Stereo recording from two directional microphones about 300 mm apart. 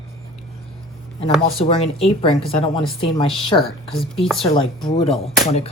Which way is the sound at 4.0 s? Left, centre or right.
Centre.